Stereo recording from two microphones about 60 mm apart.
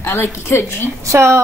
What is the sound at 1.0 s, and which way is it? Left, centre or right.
Speech, right.